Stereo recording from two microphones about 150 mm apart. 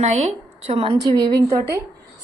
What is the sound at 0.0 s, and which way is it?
Speech, 45° right (ahead or behind).